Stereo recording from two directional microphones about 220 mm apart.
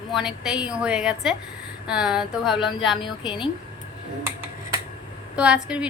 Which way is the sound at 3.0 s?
20° left (ahead or behind).